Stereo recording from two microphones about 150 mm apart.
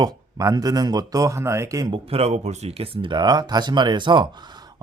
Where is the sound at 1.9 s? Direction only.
40° right (ahead or behind).